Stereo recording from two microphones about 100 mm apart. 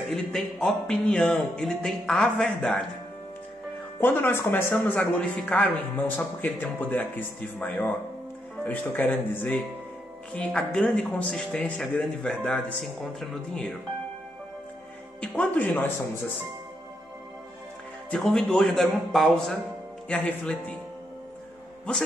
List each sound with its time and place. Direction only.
0.1 s speech: 5° left (ahead or behind)
4.0 s a man's voice: 20° left (ahead or behind); by 13.7 s centre (ahead or behind)
15.1 s a man's voice: 10° left (ahead or behind)
18.1 s speech: 5° left (ahead or behind)
20.1 s a man's voice: 15° left (ahead or behind)
21.9 s a man's voice: 10° left (ahead or behind)